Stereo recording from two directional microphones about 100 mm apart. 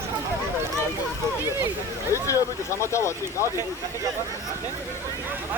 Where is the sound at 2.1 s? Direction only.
30° left (ahead or behind).